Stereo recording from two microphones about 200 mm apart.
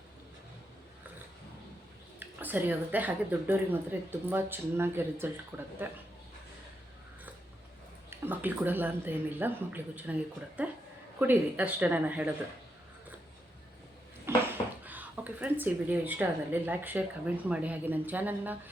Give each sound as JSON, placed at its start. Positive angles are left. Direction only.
{"t": 2.1, "sound": "a woman's voice", "side_deg": -10}
{"t": 8.1, "sound": "a woman's voice", "side_deg": -10}
{"t": 11.2, "sound": "a woman's voice", "side_deg": -10}
{"t": 14.3, "sound": "a sound", "side_deg": -10}
{"t": 14.8, "sound": "a woman's voice", "side_deg": -10}